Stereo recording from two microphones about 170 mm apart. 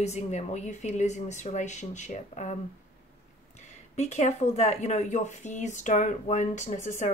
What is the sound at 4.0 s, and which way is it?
Speech, 40° left (ahead or behind).